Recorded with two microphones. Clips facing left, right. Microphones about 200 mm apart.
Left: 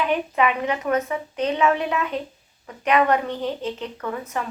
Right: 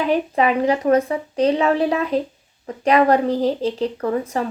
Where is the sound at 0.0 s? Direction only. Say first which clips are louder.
Right 3 dB; 35° right (ahead or behind).